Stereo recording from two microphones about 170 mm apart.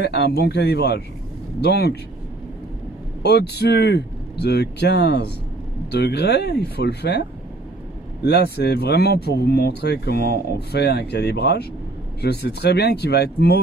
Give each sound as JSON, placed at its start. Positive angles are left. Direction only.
{"t": 0.0, "sound": "speech", "side_deg": 75}
{"t": 3.2, "sound": "speech", "side_deg": 70}